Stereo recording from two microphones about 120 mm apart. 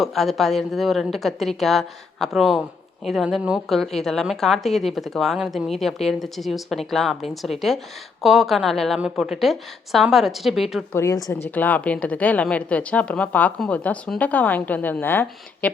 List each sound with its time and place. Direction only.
0.0 s a woman's voice: centre (ahead or behind)
10.9 s a woman's voice: 30° left (ahead or behind)
11.5 s a woman's voice: 15° left (ahead or behind)